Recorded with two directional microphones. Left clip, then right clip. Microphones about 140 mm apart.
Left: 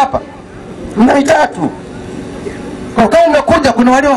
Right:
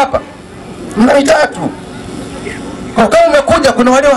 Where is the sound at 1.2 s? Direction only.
10° right (ahead or behind).